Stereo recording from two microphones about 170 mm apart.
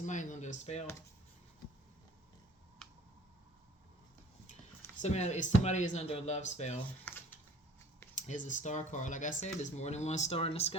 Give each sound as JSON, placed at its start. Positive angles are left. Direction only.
{"t": 0.0, "sound": "speech", "side_deg": 45}
{"t": 5.0, "sound": "speech", "side_deg": 40}
{"t": 7.1, "sound": "a sound", "side_deg": 10}
{"t": 8.1, "sound": "speech", "side_deg": 45}